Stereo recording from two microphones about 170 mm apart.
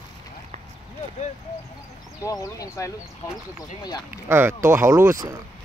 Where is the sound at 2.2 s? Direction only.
20° left (ahead or behind).